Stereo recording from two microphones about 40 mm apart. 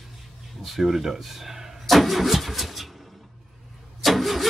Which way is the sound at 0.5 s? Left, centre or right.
Centre.